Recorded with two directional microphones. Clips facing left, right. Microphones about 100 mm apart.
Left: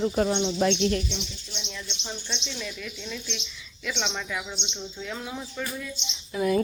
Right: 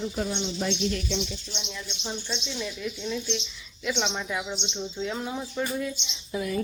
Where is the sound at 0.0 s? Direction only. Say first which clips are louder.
Left 6 dB; 60° left (ahead or behind).